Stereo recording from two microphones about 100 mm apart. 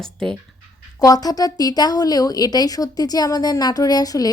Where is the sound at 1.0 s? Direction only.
40° left (ahead or behind).